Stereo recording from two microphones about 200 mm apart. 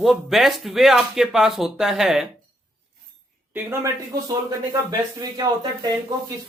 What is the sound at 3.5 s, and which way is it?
Speech, 10° right (ahead or behind).